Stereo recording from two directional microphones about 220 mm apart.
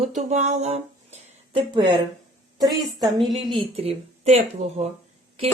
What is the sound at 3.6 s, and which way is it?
Speech, 25° right (ahead or behind).